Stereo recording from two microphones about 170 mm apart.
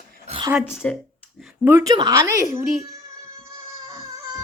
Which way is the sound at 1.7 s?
25° right (ahead or behind).